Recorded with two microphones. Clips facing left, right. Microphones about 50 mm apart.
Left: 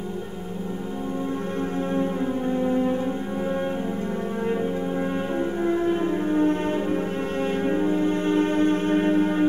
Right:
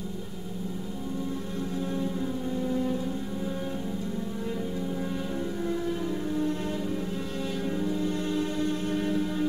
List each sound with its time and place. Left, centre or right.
2.5 s music: left
5.6 s music: left